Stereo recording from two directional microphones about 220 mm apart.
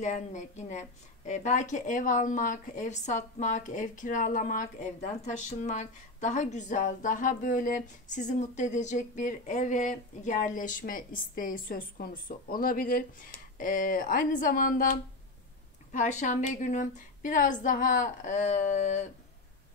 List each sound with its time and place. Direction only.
0.0 s a woman's voice: 35° left (ahead or behind)